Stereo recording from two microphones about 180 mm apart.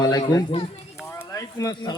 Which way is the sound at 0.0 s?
25° left (ahead or behind).